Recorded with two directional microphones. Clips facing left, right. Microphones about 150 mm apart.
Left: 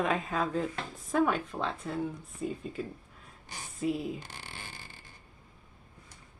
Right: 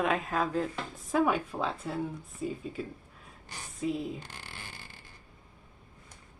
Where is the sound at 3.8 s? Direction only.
Centre (ahead or behind).